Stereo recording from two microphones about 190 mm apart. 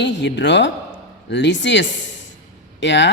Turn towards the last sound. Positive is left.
turn(degrees=70)  # may be behind; listen again after turning